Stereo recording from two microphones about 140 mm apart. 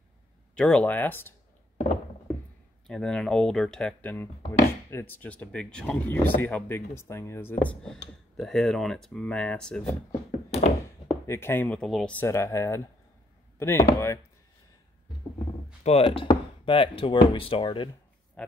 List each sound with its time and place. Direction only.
0.6 s speech: 10° left (ahead or behind)
2.9 s speech: 5° left (ahead or behind)
10.5 s thunk: 50° left (ahead or behind)
11.2 s speech: 15° left (ahead or behind)
11.8 s speech: 5° left (ahead or behind)
12.3 s speech: 20° left (ahead or behind)
15.8 s speech: 50° left (ahead or behind)